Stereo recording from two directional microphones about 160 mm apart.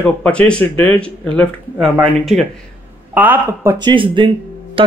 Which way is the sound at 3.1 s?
10° right (ahead or behind).